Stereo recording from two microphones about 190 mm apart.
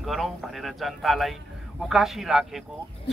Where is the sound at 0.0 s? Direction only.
Centre (ahead or behind).